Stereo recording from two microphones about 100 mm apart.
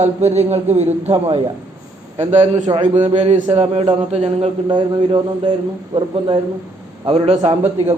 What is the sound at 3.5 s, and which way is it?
Speech, 80° right.